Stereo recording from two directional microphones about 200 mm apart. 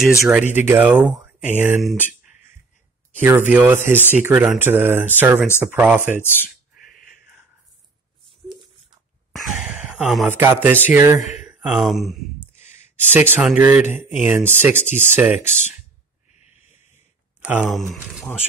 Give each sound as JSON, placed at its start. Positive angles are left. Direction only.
{"t": 0.2, "sound": "speech", "side_deg": -10}
{"t": 3.2, "sound": "speech", "side_deg": -10}
{"t": 6.2, "sound": "speech", "side_deg": 10}
{"t": 6.9, "sound": "a sound", "side_deg": 45}
{"t": 9.3, "sound": "speech", "side_deg": 0}
{"t": 15.3, "sound": "speech", "side_deg": 35}
{"t": 17.4, "sound": "speech", "side_deg": -5}